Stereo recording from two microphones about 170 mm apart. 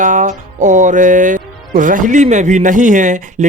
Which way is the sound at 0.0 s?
50° right (ahead or behind).